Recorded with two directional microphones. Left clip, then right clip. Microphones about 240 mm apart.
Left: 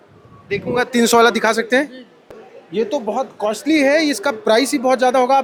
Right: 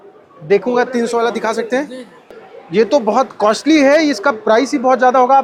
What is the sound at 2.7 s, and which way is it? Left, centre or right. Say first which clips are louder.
Speech: right 7 dB; centre.